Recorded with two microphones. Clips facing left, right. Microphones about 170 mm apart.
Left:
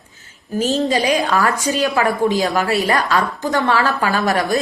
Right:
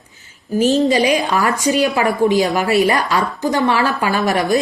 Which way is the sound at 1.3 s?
20° right (ahead or behind).